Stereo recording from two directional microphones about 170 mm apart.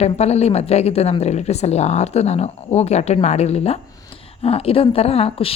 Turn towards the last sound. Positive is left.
turn(degrees=35)  # may be behind; listen again after turning